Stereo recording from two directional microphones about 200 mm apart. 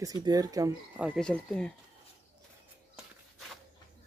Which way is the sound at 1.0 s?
Centre (ahead or behind).